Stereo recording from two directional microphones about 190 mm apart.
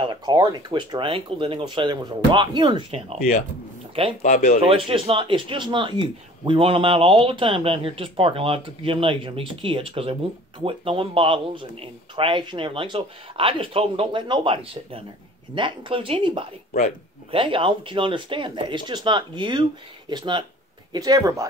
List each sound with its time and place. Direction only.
0.0 s speech: 25° right (ahead or behind)
4.2 s speech: 50° left (ahead or behind)
4.6 s speech: 30° right (ahead or behind)